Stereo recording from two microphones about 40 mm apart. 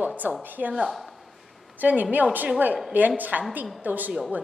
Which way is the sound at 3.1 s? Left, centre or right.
Right.